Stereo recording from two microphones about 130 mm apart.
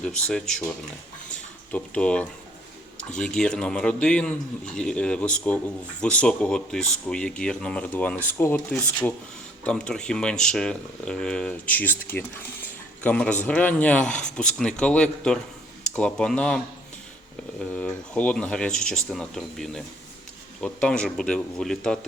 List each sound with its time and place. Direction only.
0.0 s speech: 5° left (ahead or behind)
1.3 s a sound: 10° left (ahead or behind)
3.2 s a man's voice: 5° left (ahead or behind)
17.7 s a man's voice: 10° left (ahead or behind)